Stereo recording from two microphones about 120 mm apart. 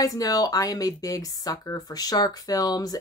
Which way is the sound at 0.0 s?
30° left (ahead or behind).